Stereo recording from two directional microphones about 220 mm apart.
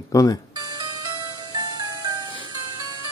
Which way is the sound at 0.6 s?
15° right (ahead or behind).